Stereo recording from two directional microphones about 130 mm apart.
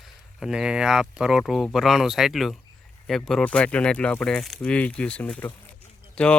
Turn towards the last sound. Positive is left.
turn(degrees=10)  # may be behind; listen again after turning